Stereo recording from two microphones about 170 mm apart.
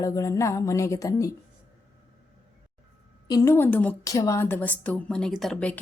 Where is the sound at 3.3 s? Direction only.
20° left (ahead or behind).